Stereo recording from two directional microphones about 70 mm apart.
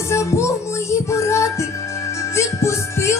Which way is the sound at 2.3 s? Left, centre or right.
Left.